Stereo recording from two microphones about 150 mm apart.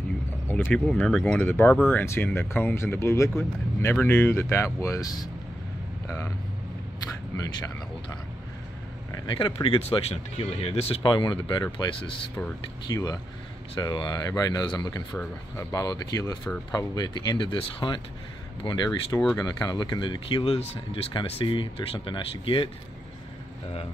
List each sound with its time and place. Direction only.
0.5 s a sound: 10° left (ahead or behind)
0.8 s speech: 5° left (ahead or behind)
7.3 s speech: 25° left (ahead or behind)
9.1 s speech: 30° left (ahead or behind)
11.0 s speech: 30° left (ahead or behind)